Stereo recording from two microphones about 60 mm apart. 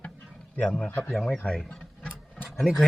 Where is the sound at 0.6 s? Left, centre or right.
Centre.